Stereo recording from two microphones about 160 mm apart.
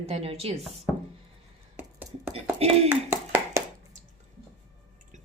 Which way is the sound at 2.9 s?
15° right (ahead or behind).